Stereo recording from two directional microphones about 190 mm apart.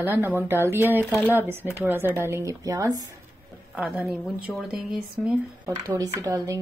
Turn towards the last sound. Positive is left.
turn(degrees=-20)  # may be behind; listen again after turning